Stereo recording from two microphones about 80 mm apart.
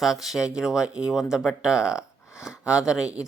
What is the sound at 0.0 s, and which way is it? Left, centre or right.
Speech, centre.